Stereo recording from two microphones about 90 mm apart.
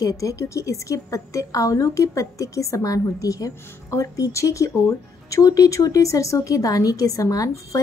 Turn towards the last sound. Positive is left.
turn(degrees=40)  # may be behind; listen again after turning